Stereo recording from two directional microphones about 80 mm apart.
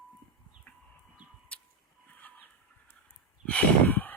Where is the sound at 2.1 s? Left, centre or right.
Left.